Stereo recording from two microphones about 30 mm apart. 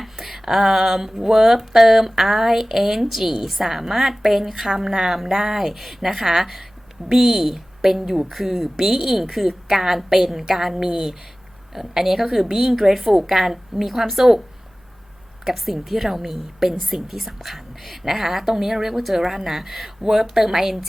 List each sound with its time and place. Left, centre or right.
0.0 s a woman's voice: centre
8.8 s a woman's voice: centre
15.4 s a woman's voice: centre